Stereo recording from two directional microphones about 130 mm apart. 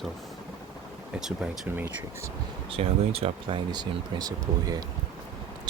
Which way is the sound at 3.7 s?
30° right (ahead or behind).